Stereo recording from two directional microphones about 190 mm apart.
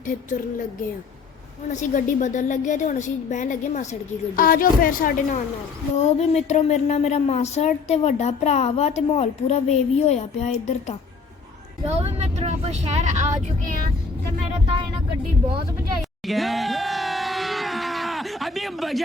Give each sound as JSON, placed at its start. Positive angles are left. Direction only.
{"t": 1.7, "sound": "speech", "side_deg": 40}
{"t": 5.9, "sound": "speech", "side_deg": 35}
{"t": 11.9, "sound": "speech", "side_deg": -35}
{"t": 16.0, "sound": "a sound", "side_deg": 0}